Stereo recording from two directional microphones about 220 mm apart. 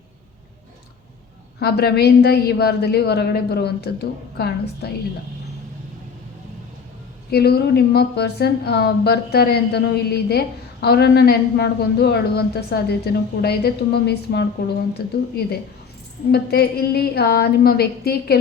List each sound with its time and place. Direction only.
1.5 s a woman's voice: 45° left (ahead or behind)
7.3 s a woman's voice: 45° left (ahead or behind)
16.3 s a woman's voice: 45° left (ahead or behind)